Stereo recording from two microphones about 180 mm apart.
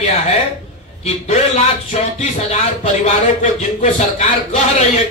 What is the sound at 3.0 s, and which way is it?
A man's voice, 40° left (ahead or behind).